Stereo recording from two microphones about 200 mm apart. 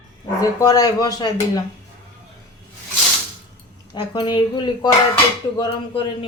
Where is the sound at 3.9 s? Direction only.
20° left (ahead or behind).